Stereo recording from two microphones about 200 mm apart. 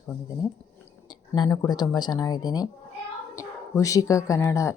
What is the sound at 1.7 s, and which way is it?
Speech, 20° left (ahead or behind).